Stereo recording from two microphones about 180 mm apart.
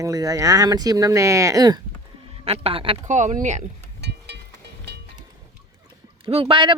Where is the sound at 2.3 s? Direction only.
30° right (ahead or behind).